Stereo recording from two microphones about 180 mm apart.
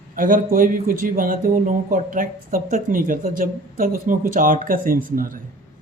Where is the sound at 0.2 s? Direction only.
50° right (ahead or behind).